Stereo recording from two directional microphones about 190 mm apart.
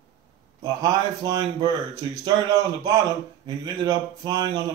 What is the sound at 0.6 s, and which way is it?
Speech, 15° right (ahead or behind).